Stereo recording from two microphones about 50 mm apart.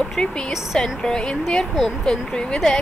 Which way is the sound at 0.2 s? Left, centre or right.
Centre.